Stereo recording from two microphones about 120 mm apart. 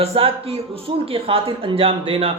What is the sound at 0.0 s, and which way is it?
Speech, 55° right (ahead or behind).